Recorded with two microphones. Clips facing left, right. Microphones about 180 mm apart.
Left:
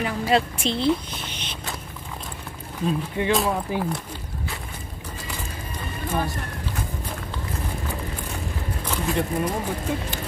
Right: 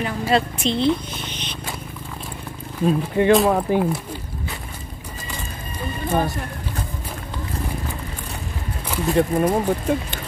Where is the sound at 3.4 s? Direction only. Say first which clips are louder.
Right 7 dB; 60° right (ahead or behind).